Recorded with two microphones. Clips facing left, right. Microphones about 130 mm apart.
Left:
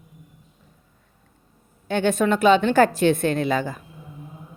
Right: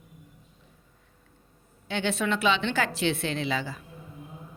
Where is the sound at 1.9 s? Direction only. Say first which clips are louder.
Left 8 dB; 50° left (ahead or behind).